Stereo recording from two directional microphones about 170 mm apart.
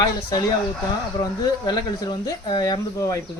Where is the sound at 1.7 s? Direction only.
25° left (ahead or behind).